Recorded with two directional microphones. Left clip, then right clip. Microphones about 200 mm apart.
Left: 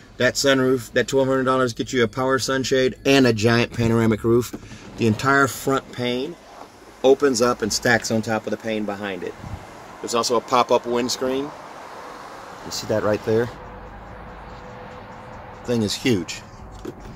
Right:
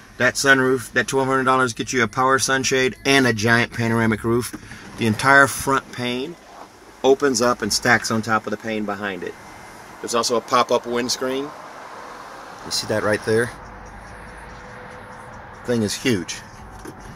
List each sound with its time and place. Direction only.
0.2 s speech: 15° right (ahead or behind)
3.0 s speech: 5° left (ahead or behind); by 9.3 s 20° right (ahead or behind)
10.0 s speech: 5° left (ahead or behind)
12.6 s speech: 15° left (ahead or behind)
15.6 s speech: 10° right (ahead or behind)